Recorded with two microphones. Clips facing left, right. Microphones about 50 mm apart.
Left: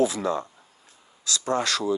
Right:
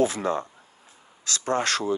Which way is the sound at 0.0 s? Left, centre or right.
Right.